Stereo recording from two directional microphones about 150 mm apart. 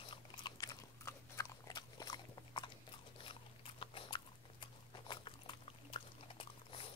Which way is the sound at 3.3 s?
35° left (ahead or behind).